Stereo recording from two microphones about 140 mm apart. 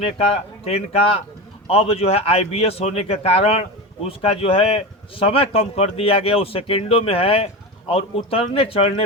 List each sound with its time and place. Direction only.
0.6 s a man's voice: 45° left (ahead or behind)